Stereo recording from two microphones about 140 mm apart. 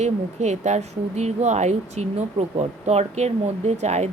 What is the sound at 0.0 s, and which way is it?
Speech, 55° right (ahead or behind).